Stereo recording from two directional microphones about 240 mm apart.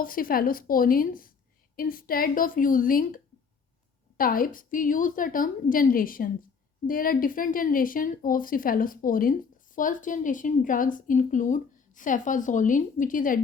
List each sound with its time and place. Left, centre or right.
0.0 s a woman's voice: left
4.2 s a woman's voice: left